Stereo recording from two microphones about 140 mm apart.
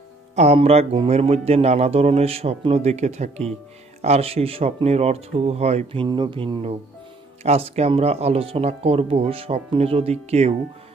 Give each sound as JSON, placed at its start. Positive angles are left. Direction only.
{"t": 0.3, "sound": "speech", "side_deg": -50}